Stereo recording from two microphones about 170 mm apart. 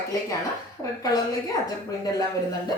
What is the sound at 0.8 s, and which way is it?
Speech, 20° left (ahead or behind).